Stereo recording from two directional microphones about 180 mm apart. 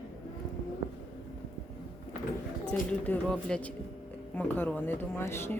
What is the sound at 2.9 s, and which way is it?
A woman's voice, 5° left (ahead or behind).